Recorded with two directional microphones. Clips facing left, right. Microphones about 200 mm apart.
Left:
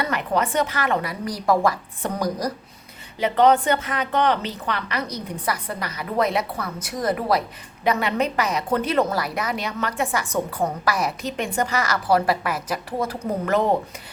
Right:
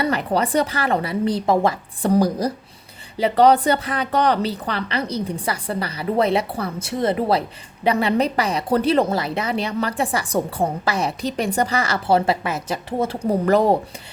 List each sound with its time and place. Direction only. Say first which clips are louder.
0.0 s a woman's voice: right 3 dB; 35° right (ahead or behind)